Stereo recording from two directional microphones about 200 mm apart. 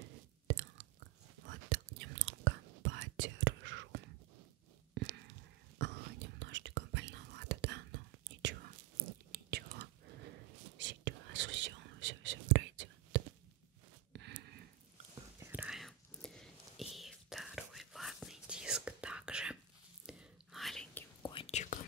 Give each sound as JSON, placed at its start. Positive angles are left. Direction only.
{"t": 0.5, "sound": "chewing", "side_deg": -65}
{"t": 1.4, "sound": "whispering", "side_deg": -70}
{"t": 5.0, "sound": "a sound", "side_deg": -60}
{"t": 5.8, "sound": "whispering", "side_deg": -60}
{"t": 9.0, "sound": "whispering", "side_deg": -40}
{"t": 9.3, "sound": "whispering", "side_deg": -55}
{"t": 14.1, "sound": "a sound", "side_deg": -60}
{"t": 15.3, "sound": "whispering", "side_deg": -10}
{"t": 21.2, "sound": "whispering", "side_deg": 25}